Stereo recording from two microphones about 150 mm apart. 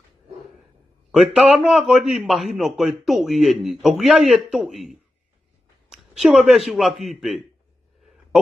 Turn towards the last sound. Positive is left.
turn(degrees=0)  # may be behind; listen again after turning